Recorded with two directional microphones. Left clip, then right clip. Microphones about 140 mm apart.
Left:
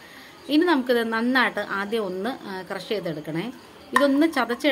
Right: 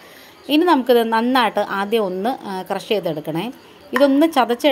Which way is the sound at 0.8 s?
30° right (ahead or behind).